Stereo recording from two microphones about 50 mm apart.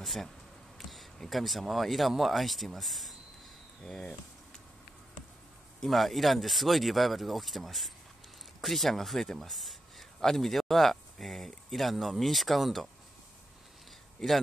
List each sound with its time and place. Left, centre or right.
0.0 s speech: centre
0.7 s a sound: centre
1.3 s speech: centre
3.8 s speech: centre
5.8 s speech: centre
14.2 s speech: centre